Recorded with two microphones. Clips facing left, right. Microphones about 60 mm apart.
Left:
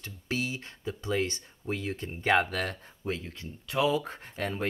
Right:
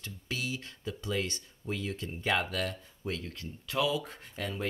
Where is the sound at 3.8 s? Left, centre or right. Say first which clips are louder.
Left 4 dB; left.